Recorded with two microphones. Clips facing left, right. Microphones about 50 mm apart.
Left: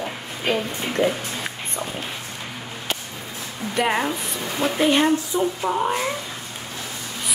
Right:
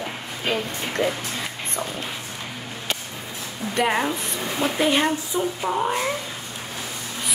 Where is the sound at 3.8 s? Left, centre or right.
Centre.